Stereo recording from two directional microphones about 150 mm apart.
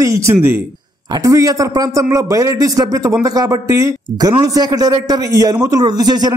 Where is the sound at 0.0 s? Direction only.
20° right (ahead or behind).